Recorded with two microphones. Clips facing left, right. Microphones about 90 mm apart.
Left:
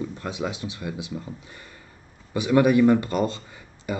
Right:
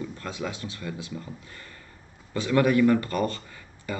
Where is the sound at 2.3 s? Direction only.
15° left (ahead or behind).